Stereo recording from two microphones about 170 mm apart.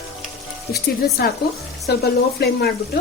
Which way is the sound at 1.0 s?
55° left (ahead or behind).